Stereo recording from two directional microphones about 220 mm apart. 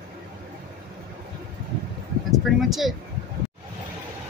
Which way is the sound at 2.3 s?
Centre (ahead or behind).